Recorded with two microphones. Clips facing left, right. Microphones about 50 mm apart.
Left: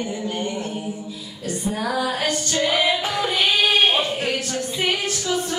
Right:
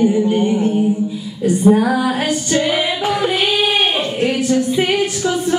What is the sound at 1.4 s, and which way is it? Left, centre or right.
Female singing, centre.